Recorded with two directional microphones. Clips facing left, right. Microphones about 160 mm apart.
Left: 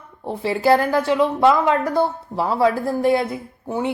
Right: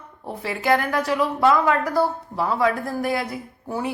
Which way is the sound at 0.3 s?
30° left (ahead or behind).